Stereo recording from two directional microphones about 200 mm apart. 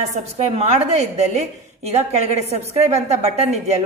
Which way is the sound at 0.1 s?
30° right (ahead or behind).